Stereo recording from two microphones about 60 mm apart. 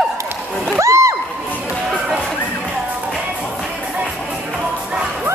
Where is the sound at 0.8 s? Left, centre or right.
Right.